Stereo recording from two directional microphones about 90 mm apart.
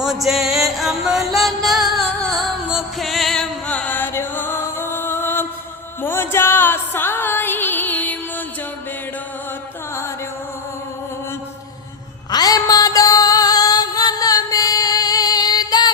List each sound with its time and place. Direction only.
0.0 s music: 5° right (ahead or behind)
3.7 s music: 15° left (ahead or behind)
12.3 s music: 45° left (ahead or behind)